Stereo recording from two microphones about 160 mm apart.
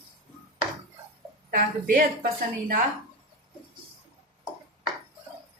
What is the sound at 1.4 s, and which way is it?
Speech, 60° right (ahead or behind).